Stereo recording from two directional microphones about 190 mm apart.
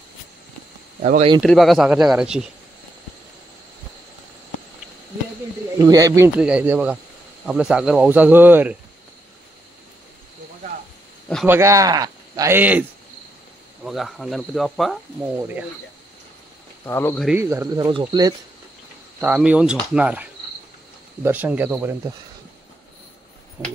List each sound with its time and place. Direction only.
1.0 s speech: 40° right (ahead or behind)
1.4 s speech: centre (ahead or behind)
5.8 s speech: 20° right (ahead or behind)
11.4 s speech: 15° right (ahead or behind)
13.8 s speech: centre (ahead or behind)
15.2 s speech: 10° right (ahead or behind)
16.8 s speech: 10° left (ahead or behind)
17.3 s speech: 15° right (ahead or behind)
19.1 s speech: 10° right (ahead or behind)
23.6 s speech: 10° right (ahead or behind)